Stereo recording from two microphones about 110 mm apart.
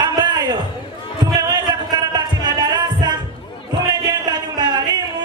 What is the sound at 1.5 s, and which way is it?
Music, 40° right (ahead or behind).